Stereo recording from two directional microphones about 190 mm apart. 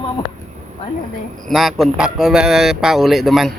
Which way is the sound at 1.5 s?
Centre (ahead or behind).